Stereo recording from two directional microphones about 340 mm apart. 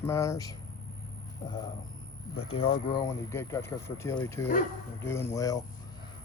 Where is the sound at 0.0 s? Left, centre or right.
Centre.